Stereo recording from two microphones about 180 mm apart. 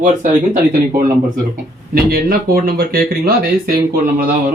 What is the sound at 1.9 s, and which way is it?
Speech, 55° right (ahead or behind).